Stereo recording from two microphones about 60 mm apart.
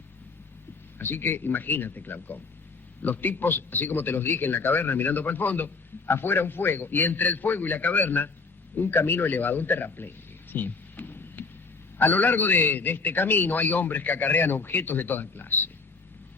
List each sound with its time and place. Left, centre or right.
0.9 s a man's voice: left